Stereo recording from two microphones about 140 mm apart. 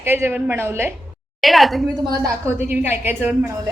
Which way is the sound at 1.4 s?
Centre (ahead or behind).